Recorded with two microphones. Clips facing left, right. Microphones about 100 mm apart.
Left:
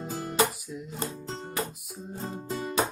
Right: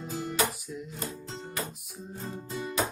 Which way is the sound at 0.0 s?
40° left (ahead or behind).